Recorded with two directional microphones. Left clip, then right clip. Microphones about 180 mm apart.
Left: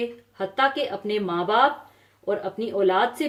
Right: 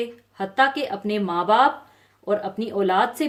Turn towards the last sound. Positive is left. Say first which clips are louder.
# right 1 dB
turn(degrees=-55)  # may be behind; listen again after turning